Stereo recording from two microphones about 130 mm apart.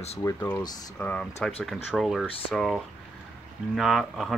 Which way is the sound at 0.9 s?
10° left (ahead or behind).